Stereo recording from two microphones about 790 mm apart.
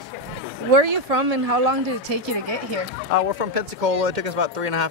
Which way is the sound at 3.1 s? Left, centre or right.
Right.